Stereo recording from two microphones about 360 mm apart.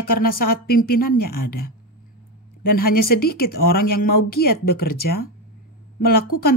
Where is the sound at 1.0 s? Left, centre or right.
Left.